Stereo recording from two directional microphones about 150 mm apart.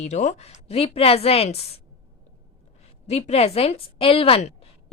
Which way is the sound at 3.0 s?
45° left (ahead or behind).